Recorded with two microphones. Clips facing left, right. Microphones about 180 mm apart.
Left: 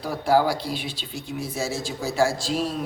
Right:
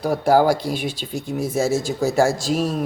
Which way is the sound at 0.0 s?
45° right (ahead or behind).